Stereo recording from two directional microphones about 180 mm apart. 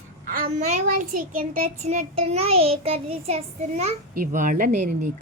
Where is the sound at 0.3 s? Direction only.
50° right (ahead or behind); by 3.9 s 35° right (ahead or behind).